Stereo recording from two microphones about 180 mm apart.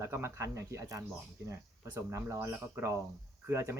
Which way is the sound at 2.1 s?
15° right (ahead or behind).